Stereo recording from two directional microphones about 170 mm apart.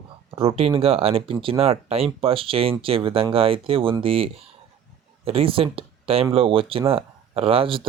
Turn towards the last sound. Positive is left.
turn(degrees=-30)  # may be behind; listen again after turning